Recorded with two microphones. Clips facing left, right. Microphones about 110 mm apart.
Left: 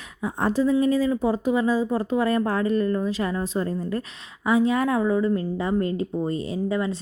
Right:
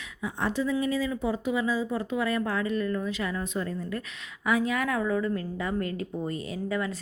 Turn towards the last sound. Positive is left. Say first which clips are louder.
# left 5 dB
turn(degrees=25)  # may be behind; listen again after turning